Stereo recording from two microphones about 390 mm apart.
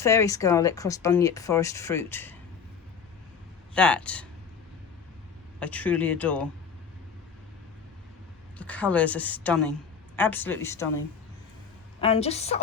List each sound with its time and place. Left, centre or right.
0.0 s speech: centre
3.8 s a woman's voice: centre
5.5 s a woman's voice: centre
8.5 s a woman's voice: centre
11.9 s speech: centre